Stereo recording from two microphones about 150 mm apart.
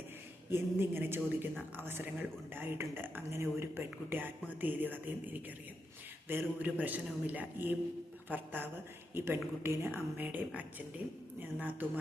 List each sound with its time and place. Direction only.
0.5 s speech: 15° right (ahead or behind)